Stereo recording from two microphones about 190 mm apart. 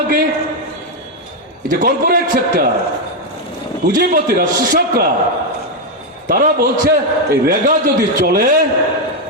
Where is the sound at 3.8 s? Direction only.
50° right (ahead or behind).